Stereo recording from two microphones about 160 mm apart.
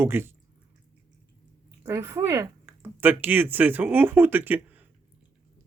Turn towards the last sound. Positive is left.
turn(degrees=-10)  # may be behind; listen again after turning